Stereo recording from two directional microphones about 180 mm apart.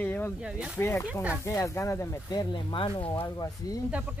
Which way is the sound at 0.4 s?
5° right (ahead or behind).